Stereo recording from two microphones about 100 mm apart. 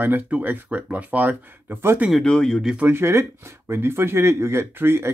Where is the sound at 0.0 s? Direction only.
20° right (ahead or behind).